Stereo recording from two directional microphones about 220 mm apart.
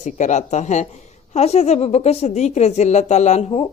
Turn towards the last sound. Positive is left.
turn(degrees=25)  # may be behind; listen again after turning